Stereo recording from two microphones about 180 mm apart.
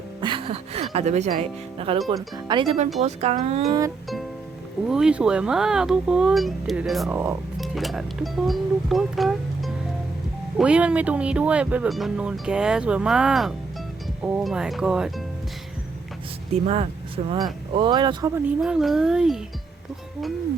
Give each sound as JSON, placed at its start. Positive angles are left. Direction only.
{"t": 0.2, "sound": "music", "side_deg": -25}
{"t": 2.0, "sound": "speech", "side_deg": -25}
{"t": 4.9, "sound": "speech", "side_deg": -5}
{"t": 7.1, "sound": "speech", "side_deg": -10}
{"t": 7.6, "sound": "speech", "side_deg": 0}
{"t": 16.5, "sound": "speech", "side_deg": -35}
{"t": 18.6, "sound": "speech", "side_deg": 0}